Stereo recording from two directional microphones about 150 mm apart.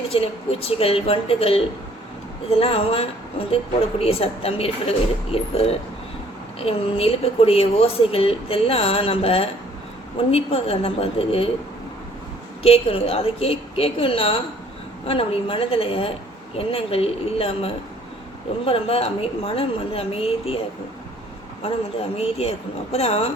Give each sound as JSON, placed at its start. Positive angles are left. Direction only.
{"t": 0.1, "sound": "speech", "side_deg": 40}
{"t": 12.6, "sound": "speech", "side_deg": 40}
{"t": 22.2, "sound": "speech", "side_deg": 45}